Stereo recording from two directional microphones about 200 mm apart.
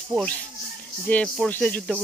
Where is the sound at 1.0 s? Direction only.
5° left (ahead or behind).